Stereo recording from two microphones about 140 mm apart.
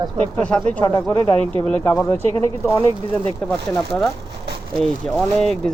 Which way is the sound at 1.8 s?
25° left (ahead or behind).